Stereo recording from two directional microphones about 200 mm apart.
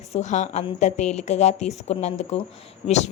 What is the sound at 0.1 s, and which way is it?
A woman's voice, 35° left (ahead or behind).